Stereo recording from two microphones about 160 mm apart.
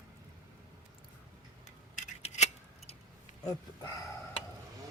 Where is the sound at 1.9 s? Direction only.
45° left (ahead or behind).